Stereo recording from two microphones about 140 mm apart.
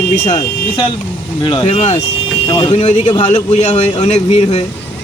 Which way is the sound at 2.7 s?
55° left (ahead or behind).